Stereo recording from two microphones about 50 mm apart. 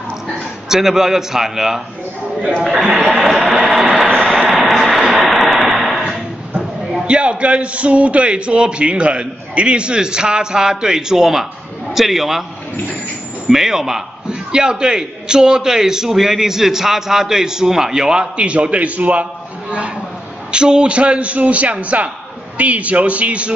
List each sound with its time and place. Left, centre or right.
0.7 s a man's voice: centre
3.2 s a sound: centre
7.1 s a man's voice: right; by 12.4 s centre
13.5 s a man's voice: centre; by 19.2 s right
20.5 s a man's voice: centre